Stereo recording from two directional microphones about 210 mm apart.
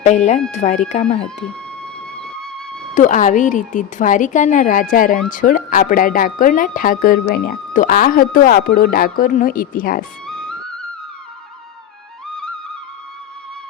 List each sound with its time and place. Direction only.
0.5 s speech: 35° left (ahead or behind)
1.2 s speech: 5° left (ahead or behind)
2.9 s speech: 35° left (ahead or behind)